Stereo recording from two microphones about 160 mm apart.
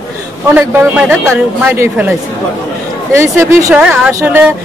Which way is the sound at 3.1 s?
15° right (ahead or behind).